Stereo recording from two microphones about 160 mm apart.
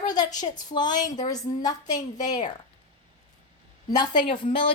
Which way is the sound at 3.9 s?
25° left (ahead or behind).